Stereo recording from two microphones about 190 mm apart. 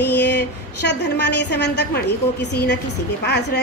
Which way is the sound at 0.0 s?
60° left (ahead or behind).